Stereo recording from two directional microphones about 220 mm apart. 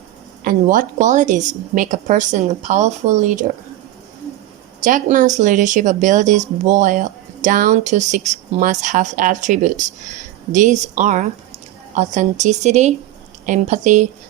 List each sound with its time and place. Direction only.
0.4 s speech: 35° right (ahead or behind)
4.8 s speech: 35° right (ahead or behind)